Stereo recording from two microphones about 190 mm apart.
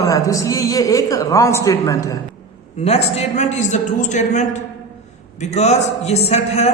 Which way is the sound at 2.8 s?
35° left (ahead or behind).